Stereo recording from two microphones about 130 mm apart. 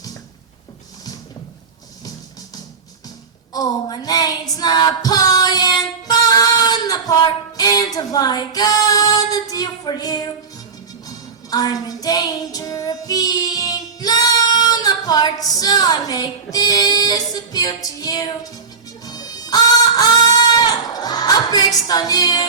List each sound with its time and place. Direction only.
3.5 s a woman's voice: 30° left (ahead or behind)
4.5 s female singing: 30° left (ahead or behind)
11.5 s child singing: 30° left (ahead or behind)
19.0 s music: 30° left (ahead or behind)